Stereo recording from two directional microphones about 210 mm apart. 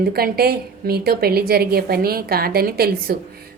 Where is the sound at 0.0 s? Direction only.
45° right (ahead or behind).